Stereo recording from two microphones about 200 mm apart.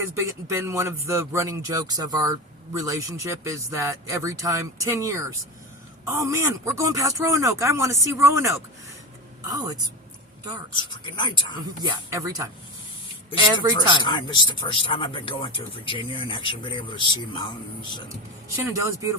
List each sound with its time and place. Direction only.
0.1 s speech: 15° right (ahead or behind)
11.2 s speech: 25° left (ahead or behind)
11.8 s speech: 15° right (ahead or behind)
13.6 s speech: 15° right (ahead or behind)
14.0 s speech: 20° left (ahead or behind)
18.4 s speech: 15° right (ahead or behind)